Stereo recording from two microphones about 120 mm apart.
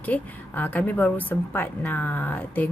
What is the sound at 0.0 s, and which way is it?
A woman's voice, 15° left (ahead or behind).